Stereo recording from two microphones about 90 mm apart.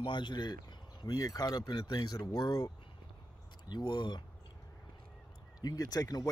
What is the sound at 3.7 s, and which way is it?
Speech, 50° left (ahead or behind).